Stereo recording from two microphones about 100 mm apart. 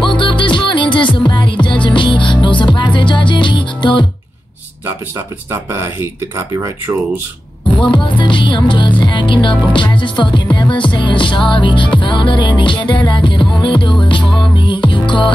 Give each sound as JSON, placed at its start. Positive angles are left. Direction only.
{"t": 0.0, "sound": "music", "side_deg": 55}
{"t": 5.5, "sound": "speech", "side_deg": -25}
{"t": 7.8, "sound": "music", "side_deg": 55}